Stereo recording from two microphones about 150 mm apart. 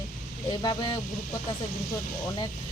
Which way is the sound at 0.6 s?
25° left (ahead or behind).